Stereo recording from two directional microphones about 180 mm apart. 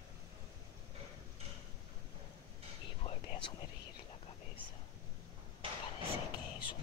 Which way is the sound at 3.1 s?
25° left (ahead or behind).